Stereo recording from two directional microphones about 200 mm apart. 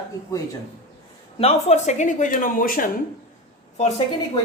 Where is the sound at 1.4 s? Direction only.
30° left (ahead or behind).